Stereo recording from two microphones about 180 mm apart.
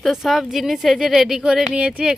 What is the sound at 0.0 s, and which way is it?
Speech, centre (ahead or behind).